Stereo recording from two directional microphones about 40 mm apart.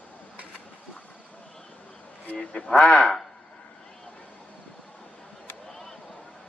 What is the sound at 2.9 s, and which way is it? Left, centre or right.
Speech, left.